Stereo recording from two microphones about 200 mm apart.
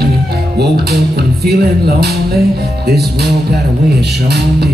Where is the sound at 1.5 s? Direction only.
55° right (ahead or behind).